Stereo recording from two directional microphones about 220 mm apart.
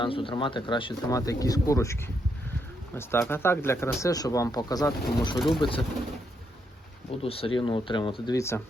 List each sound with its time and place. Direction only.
0.0 s speech: 25° left (ahead or behind)
7.1 s speech: 25° left (ahead or behind)